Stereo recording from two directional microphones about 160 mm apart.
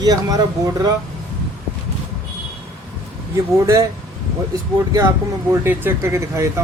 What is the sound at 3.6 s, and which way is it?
Speech, 20° right (ahead or behind).